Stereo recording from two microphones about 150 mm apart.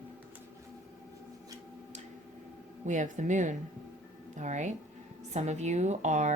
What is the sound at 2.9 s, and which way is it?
Speech, 55° right (ahead or behind).